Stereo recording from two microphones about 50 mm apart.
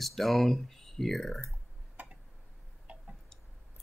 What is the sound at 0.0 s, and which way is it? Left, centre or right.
Speech, centre.